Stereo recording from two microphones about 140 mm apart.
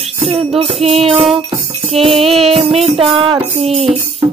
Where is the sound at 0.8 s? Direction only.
45° right (ahead or behind).